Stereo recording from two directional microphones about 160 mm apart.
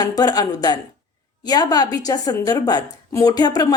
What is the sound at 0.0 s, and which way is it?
A woman's voice, 25° left (ahead or behind).